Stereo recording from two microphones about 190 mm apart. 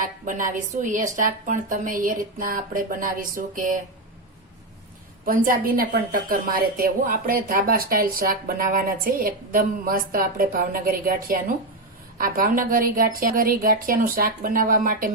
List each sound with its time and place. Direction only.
0.0 s a woman's voice: 45° right (ahead or behind)
5.2 s a woman's voice: 50° right (ahead or behind)